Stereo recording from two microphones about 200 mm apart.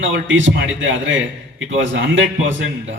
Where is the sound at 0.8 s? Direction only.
70° right (ahead or behind).